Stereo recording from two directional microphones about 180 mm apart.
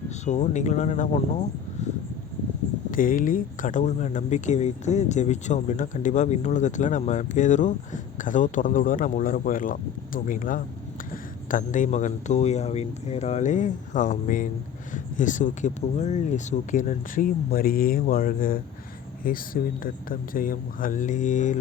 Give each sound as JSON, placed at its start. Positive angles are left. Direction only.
{"t": 0.3, "sound": "speech", "side_deg": 40}
{"t": 2.9, "sound": "speech", "side_deg": 50}